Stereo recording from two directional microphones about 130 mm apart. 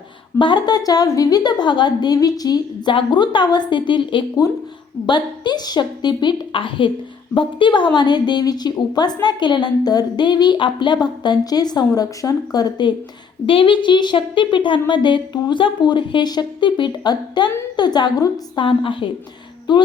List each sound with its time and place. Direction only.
0.3 s a woman's voice: 35° left (ahead or behind)
13.5 s a woman's voice: 40° left (ahead or behind)